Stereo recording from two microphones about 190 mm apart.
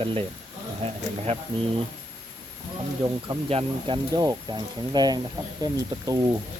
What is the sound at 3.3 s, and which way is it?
Speech, 30° right (ahead or behind).